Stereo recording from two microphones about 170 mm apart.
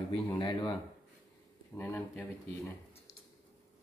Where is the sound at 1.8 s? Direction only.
10° left (ahead or behind).